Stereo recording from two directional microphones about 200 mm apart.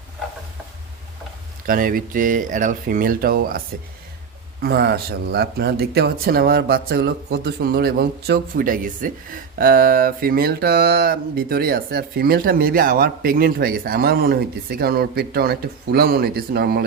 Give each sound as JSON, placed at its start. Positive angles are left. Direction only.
{"t": 1.6, "sound": "speech", "side_deg": -45}
{"t": 4.6, "sound": "speech", "side_deg": -55}